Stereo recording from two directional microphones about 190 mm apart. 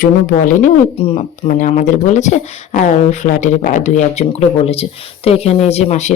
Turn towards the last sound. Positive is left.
turn(degrees=35)  # may be behind; listen again after turning